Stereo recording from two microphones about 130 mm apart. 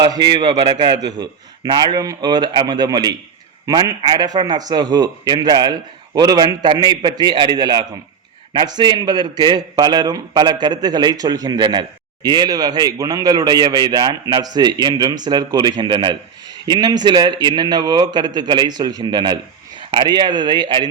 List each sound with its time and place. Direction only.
0.0 s a man's voice: 35° right (ahead or behind)